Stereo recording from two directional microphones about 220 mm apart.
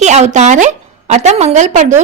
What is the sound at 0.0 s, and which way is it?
A woman's voice, 30° right (ahead or behind).